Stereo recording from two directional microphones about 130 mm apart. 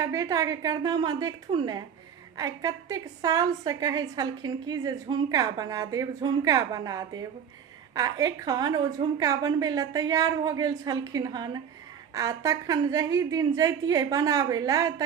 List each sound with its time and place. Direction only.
0.0 s a woman's voice: 25° right (ahead or behind)